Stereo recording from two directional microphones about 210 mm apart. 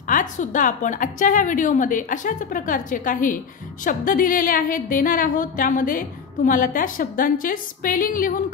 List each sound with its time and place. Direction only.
0.0 s a woman's voice: 40° left (ahead or behind)